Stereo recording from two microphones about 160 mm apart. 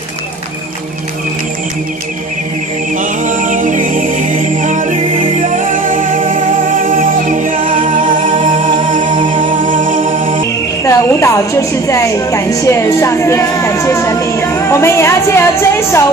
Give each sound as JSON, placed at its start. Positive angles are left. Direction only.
{"t": 3.0, "sound": "a capella", "side_deg": -55}
{"t": 6.8, "sound": "music", "side_deg": -55}
{"t": 9.1, "sound": "humming", "side_deg": -30}
{"t": 9.4, "sound": "music", "side_deg": -55}
{"t": 10.8, "sound": "a woman's voice", "side_deg": 20}